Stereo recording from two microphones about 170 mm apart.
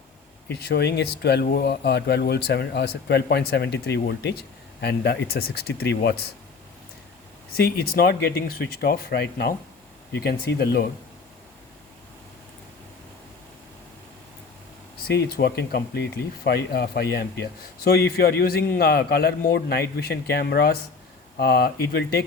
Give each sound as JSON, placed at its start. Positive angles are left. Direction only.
{"t": 0.5, "sound": "speech", "side_deg": 70}
{"t": 7.5, "sound": "speech", "side_deg": 65}
{"t": 15.0, "sound": "a man's voice", "side_deg": 70}